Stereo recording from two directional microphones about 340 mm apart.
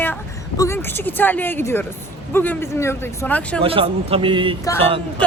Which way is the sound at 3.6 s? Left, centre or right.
Centre.